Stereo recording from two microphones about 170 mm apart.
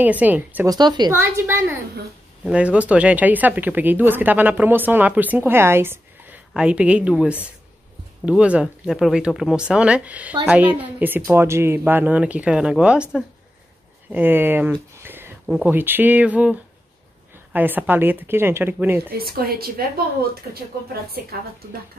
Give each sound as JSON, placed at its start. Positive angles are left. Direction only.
{"t": 0.0, "sound": "speech", "side_deg": -10}
{"t": 0.7, "sound": "a woman's voice", "side_deg": -25}
{"t": 1.1, "sound": "speech", "side_deg": -15}
{"t": 19.1, "sound": "a woman's voice", "side_deg": -60}
{"t": 20.9, "sound": "a woman's voice", "side_deg": -65}